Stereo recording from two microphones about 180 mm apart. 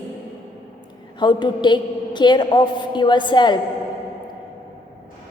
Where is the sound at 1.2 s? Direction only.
25° left (ahead or behind).